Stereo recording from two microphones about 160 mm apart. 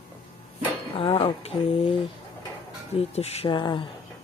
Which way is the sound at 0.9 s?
35° left (ahead or behind).